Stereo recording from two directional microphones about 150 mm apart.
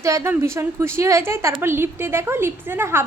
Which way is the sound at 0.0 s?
20° right (ahead or behind).